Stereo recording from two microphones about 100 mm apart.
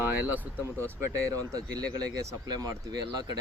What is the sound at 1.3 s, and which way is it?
Speech, 40° right (ahead or behind).